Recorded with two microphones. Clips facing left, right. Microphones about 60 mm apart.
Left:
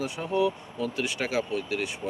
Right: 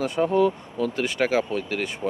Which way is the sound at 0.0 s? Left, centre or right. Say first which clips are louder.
Right 6 dB; right.